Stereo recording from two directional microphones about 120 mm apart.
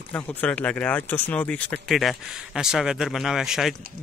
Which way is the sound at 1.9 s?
Centre (ahead or behind).